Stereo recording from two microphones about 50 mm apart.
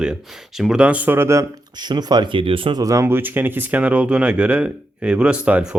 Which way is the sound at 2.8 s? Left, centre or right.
Right.